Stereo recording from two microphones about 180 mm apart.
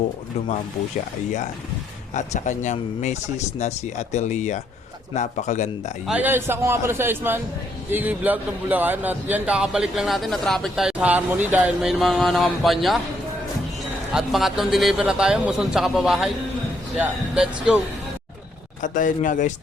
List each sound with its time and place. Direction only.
2.1 s speech: 40° left (ahead or behind)
6.1 s a man's voice: 10° right (ahead or behind)
14.1 s a man's voice: centre (ahead or behind)
18.8 s speech: 45° left (ahead or behind)